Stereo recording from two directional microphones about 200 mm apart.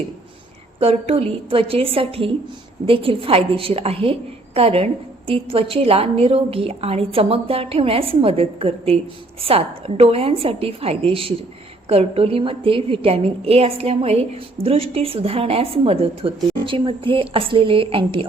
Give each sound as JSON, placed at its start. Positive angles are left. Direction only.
{"t": 0.8, "sound": "a woman's voice", "side_deg": -30}